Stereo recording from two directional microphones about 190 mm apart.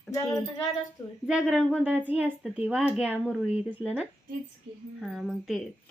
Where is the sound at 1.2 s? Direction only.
Centre (ahead or behind).